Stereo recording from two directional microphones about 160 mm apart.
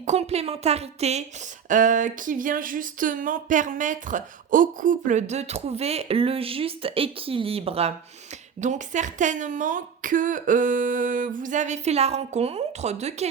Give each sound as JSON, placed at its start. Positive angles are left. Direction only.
{"t": 0.0, "sound": "speech", "side_deg": -45}
{"t": 1.6, "sound": "speech", "side_deg": -55}
{"t": 8.6, "sound": "speech", "side_deg": -50}